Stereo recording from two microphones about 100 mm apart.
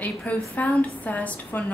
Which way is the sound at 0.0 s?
15° left (ahead or behind).